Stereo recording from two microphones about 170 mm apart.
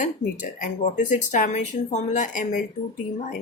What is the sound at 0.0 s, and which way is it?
Speech, 50° left (ahead or behind).